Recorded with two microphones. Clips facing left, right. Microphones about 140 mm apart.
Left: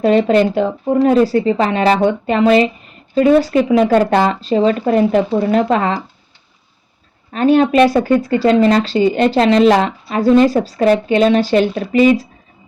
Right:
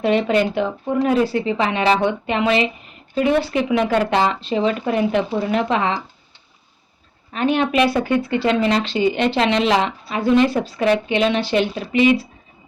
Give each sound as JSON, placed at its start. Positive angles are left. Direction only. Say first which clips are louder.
{"t": 0.0, "sound": "speech", "louder": "left 5 dB", "side_deg": 40}
{"t": 7.3, "sound": "speech", "louder": "left 7 dB", "side_deg": 40}